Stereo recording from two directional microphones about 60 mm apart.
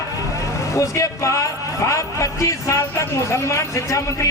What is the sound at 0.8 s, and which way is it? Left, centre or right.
A man's voice, left.